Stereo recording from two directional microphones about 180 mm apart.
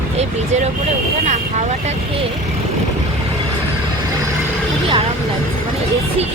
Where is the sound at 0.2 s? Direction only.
35° right (ahead or behind).